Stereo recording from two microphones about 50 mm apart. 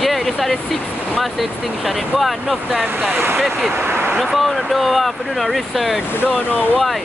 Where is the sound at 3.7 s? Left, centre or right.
Right.